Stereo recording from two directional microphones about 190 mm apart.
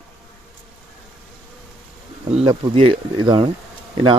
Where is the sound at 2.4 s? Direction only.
25° right (ahead or behind).